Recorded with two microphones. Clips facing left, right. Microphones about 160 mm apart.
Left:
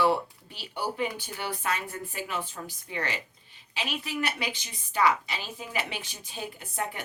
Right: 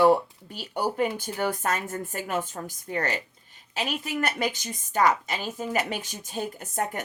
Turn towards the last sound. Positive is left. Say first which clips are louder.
# right 4 dB
turn(degrees=-45)  # may be behind; listen again after turning